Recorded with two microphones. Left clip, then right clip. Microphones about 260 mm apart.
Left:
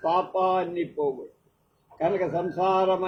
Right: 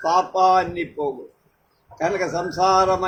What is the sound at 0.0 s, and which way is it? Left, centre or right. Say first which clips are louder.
A man's voice: right 6 dB; right.